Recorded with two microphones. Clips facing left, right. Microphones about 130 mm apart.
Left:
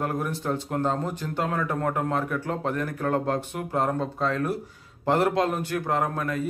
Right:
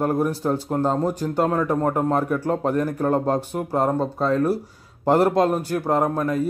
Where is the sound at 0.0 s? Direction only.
35° right (ahead or behind).